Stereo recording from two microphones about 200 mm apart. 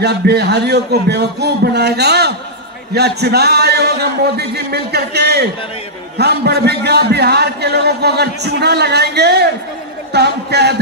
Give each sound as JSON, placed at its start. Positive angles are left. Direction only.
{"t": 0.0, "sound": "a man's voice", "side_deg": -55}